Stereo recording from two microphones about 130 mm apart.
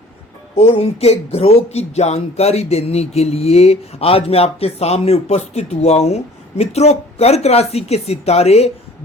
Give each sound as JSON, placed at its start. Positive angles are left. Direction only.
{"t": 0.5, "sound": "speech", "side_deg": 50}